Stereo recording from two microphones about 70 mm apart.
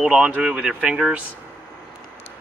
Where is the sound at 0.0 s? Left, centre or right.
Centre.